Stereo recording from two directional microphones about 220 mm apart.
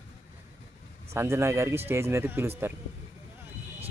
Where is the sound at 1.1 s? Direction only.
10° right (ahead or behind).